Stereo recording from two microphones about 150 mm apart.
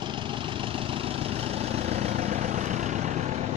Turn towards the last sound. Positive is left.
turn(degrees=-50)  # may be behind; listen again after turning